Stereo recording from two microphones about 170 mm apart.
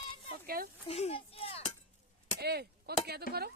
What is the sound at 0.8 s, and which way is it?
Speech, 35° left (ahead or behind).